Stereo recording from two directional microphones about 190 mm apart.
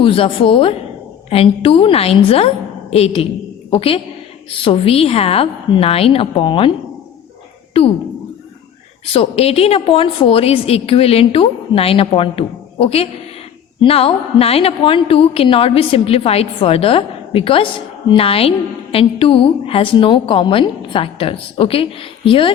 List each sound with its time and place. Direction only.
0.0 s a woman's voice: 30° left (ahead or behind)
7.8 s a woman's voice: 30° left (ahead or behind)
9.1 s a woman's voice: 30° left (ahead or behind)